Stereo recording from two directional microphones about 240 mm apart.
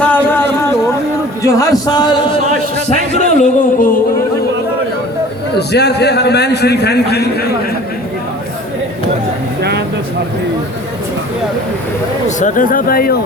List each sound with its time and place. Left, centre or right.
0.0 s a sound: centre
1.4 s speech: centre
3.1 s singing: left
5.5 s a man's voice: left
12.4 s singing: left